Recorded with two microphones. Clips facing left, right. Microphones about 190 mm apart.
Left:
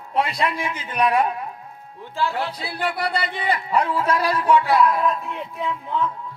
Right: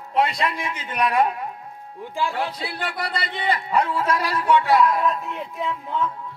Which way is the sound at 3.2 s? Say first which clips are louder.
Left 1 dB; 30° right (ahead or behind).